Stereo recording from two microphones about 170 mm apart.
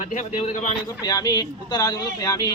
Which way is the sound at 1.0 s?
20° left (ahead or behind).